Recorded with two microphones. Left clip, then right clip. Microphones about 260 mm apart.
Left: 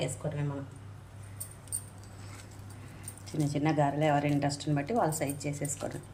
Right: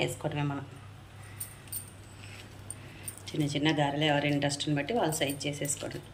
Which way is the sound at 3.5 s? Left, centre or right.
Centre.